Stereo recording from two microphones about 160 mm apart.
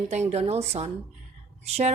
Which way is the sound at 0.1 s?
45° right (ahead or behind).